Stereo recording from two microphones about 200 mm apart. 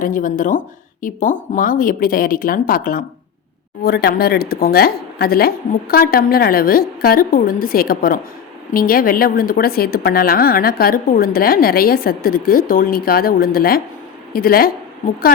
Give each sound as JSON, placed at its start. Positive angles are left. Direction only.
{"t": 0.0, "sound": "a woman's voice", "side_deg": 40}